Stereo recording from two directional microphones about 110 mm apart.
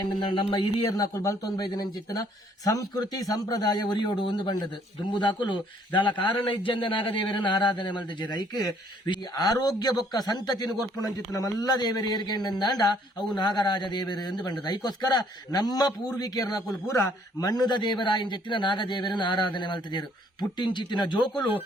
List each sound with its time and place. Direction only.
0.0 s a man's voice: 45° left (ahead or behind)
0.9 s a man's voice: 30° left (ahead or behind)